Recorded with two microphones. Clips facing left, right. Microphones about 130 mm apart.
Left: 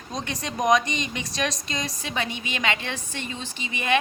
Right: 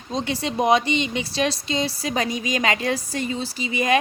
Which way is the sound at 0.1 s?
30° right (ahead or behind).